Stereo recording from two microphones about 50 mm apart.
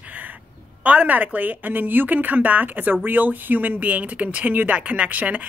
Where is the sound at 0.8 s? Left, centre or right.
Right.